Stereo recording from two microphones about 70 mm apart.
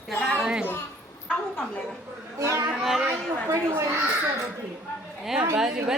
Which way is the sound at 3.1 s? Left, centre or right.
Right.